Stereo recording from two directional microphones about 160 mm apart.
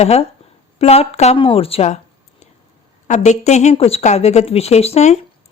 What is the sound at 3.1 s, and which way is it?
A woman's voice, 45° left (ahead or behind).